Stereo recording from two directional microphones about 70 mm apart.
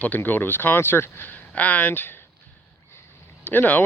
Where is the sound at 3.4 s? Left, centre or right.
Left.